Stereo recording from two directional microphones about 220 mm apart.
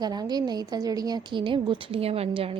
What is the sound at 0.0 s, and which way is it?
A woman's voice, 20° right (ahead or behind).